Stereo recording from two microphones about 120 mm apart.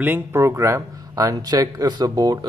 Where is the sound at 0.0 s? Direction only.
20° right (ahead or behind).